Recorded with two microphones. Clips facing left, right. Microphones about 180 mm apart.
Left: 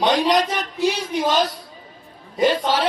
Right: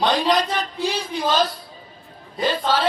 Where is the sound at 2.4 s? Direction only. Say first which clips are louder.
Left 3 dB; 20° left (ahead or behind).